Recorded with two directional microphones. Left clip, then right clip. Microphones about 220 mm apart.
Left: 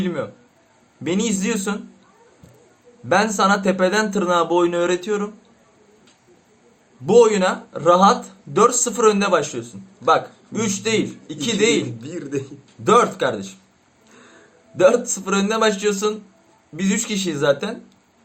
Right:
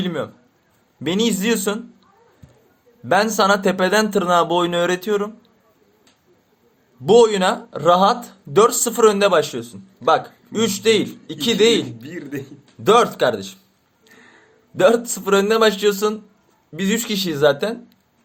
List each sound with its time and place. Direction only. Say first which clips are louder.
0.0 s speech: even; 40° right (ahead or behind)
3.1 s speech: right 1 dB; 45° right (ahead or behind)
7.0 s speech: right 1 dB; 45° right (ahead or behind)
11.9 s a man's voice: left 3 dB; 20° right (ahead or behind)
12.8 s speech: right 1 dB; 40° right (ahead or behind)
14.8 s speech: even; 40° right (ahead or behind)